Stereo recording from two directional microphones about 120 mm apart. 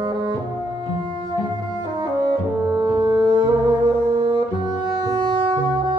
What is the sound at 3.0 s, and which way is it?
Music, 40° right (ahead or behind).